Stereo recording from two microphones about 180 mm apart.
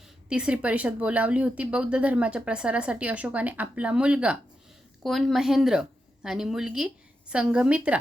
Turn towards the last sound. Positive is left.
turn(degrees=-5)  # may be behind; listen again after turning